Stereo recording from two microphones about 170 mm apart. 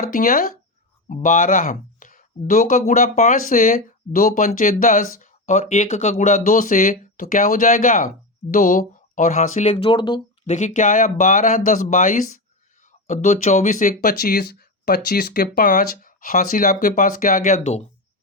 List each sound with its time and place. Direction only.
0.0 s speech: 55° left (ahead or behind)
9.7 s speech: 30° left (ahead or behind)
10.4 s speech: 45° left (ahead or behind)